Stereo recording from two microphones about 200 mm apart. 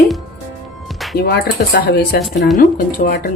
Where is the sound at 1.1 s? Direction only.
50° left (ahead or behind).